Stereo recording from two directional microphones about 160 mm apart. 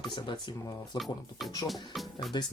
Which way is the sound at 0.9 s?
Centre (ahead or behind).